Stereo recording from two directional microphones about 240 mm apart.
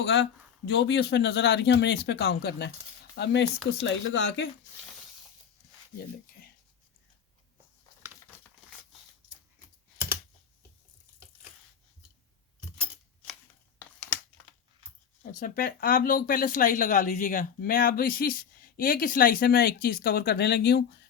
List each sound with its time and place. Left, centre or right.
0.0 s speech: left
15.2 s speech: left